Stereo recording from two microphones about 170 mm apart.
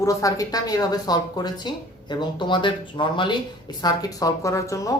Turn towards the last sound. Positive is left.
turn(degrees=20)  # may be behind; listen again after turning